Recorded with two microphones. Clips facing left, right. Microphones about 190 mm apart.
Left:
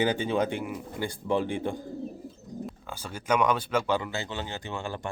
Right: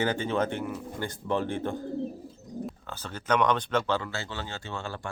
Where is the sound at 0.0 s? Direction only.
15° left (ahead or behind).